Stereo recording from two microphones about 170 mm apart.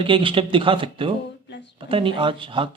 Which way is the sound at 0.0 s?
30° right (ahead or behind).